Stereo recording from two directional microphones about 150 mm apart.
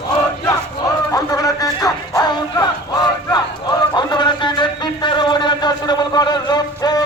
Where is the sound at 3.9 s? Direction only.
30° left (ahead or behind).